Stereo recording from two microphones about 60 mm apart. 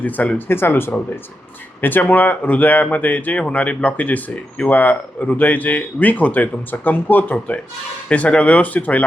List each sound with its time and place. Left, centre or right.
0.0 s speech: left
0.4 s speech: left
7.3 s speech: left